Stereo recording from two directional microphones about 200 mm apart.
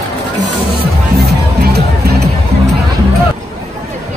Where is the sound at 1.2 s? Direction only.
50° right (ahead or behind).